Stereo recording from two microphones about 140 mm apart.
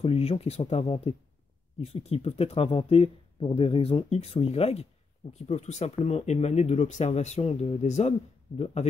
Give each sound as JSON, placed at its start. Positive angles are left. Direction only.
{"t": 0.0, "sound": "speech", "side_deg": 45}